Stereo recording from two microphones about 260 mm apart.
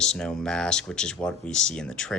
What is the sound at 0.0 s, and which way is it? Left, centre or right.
Speech, centre.